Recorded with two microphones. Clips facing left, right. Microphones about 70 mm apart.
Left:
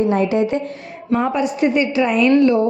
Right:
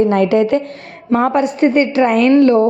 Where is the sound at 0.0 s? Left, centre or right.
Right.